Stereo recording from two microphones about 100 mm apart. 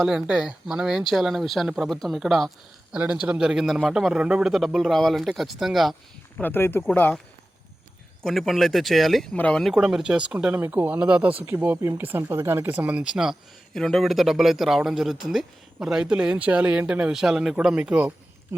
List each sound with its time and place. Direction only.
0.0 s speech: 5° right (ahead or behind)
2.9 s speech: 10° right (ahead or behind)
6.3 s speech: 20° left (ahead or behind)
8.2 s speech: centre (ahead or behind)
9.3 s speech: 10° left (ahead or behind)
9.7 s speech: 5° right (ahead or behind)
13.7 s speech: 5° left (ahead or behind); by 18.1 s 10° right (ahead or behind)